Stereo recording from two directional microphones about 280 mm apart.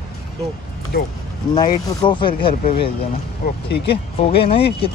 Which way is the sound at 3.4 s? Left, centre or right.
Left.